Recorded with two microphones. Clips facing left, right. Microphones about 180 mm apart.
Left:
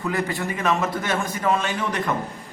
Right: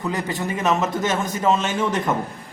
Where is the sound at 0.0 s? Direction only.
20° right (ahead or behind).